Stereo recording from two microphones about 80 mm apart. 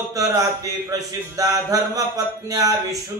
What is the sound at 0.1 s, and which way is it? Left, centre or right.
Speech, right.